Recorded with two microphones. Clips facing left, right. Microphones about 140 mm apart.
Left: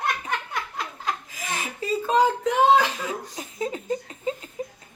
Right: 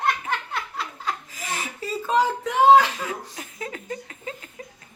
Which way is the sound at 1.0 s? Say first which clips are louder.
Left 2 dB; 15° left (ahead or behind).